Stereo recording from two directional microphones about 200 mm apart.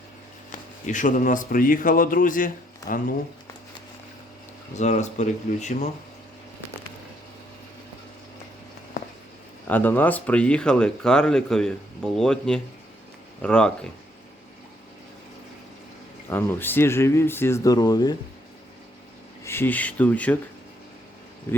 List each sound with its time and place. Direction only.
0.5 s speech: 40° left (ahead or behind)
4.7 s speech: 35° left (ahead or behind)
9.6 s speech: 10° left (ahead or behind)
16.3 s speech: 10° left (ahead or behind)
19.5 s speech: 10° left (ahead or behind)